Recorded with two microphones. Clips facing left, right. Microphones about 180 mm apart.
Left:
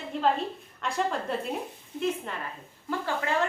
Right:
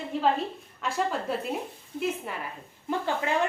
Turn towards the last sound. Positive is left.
turn(degrees=-20)  # may be behind; listen again after turning